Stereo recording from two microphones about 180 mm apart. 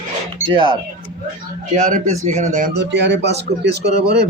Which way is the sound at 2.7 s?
75° right (ahead or behind).